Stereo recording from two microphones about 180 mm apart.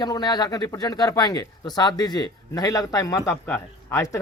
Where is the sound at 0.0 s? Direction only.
20° left (ahead or behind).